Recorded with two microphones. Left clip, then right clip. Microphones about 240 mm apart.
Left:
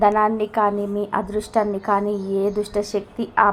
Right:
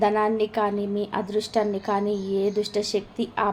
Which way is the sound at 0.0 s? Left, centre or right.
Centre.